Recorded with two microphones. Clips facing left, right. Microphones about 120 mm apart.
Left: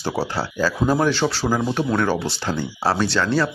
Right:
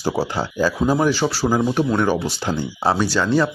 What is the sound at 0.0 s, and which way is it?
Speech, 15° right (ahead or behind).